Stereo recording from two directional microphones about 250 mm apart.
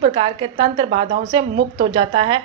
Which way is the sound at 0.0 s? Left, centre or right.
Right.